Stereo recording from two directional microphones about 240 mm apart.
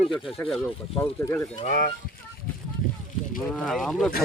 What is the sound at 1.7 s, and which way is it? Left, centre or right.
Speech, left.